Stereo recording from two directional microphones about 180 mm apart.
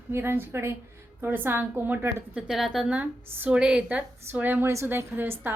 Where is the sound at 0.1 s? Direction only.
10° right (ahead or behind).